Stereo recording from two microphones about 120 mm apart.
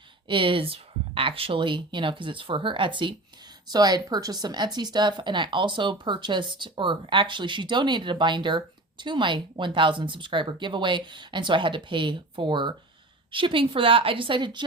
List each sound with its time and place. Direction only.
0.3 s speech: 45° right (ahead or behind)